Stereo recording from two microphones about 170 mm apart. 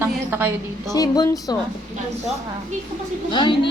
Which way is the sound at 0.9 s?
20° left (ahead or behind).